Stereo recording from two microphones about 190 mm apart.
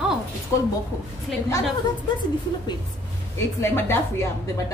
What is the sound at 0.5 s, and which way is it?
Speech, 15° left (ahead or behind).